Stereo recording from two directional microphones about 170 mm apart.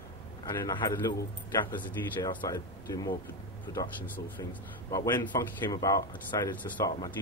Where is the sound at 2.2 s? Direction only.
20° left (ahead or behind).